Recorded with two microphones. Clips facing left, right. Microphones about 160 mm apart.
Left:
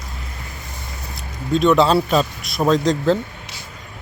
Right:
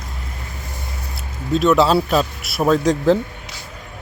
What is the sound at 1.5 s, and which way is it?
A man's voice, centre (ahead or behind).